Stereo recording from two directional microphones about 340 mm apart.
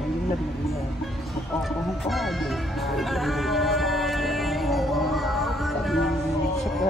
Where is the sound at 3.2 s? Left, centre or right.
Centre.